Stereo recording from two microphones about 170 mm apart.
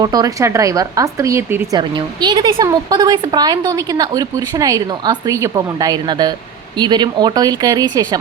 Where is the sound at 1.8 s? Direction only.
25° right (ahead or behind).